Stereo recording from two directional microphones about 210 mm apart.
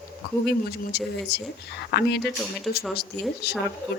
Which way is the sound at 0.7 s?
50° left (ahead or behind).